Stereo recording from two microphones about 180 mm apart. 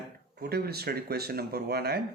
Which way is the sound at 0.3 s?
60° right (ahead or behind).